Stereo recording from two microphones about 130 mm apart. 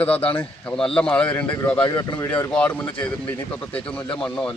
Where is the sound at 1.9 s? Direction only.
35° left (ahead or behind).